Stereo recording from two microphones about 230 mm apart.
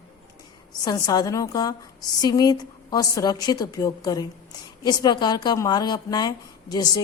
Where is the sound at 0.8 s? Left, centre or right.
Centre.